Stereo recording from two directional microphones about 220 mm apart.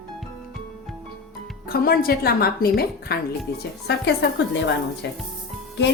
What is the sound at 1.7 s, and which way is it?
Speech, 45° left (ahead or behind).